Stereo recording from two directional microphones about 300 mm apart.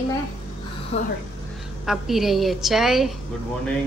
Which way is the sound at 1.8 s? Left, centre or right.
Centre.